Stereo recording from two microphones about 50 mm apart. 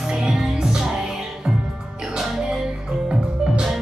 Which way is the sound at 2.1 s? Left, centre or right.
Centre.